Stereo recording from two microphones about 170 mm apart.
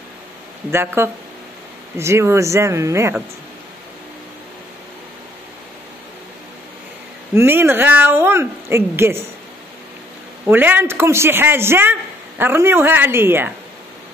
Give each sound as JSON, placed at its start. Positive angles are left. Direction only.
{"t": 0.7, "sound": "a man's voice", "side_deg": -15}
{"t": 7.3, "sound": "a man's voice", "side_deg": -15}
{"t": 10.4, "sound": "a man's voice", "side_deg": -10}